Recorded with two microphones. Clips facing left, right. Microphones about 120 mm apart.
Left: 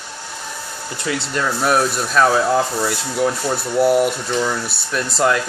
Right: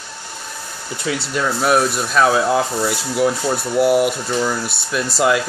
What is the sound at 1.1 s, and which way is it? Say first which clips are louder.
Speech: right 1 dB; 5° right (ahead or behind).